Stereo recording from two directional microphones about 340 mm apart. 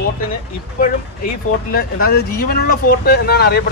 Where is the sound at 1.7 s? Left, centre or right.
Left.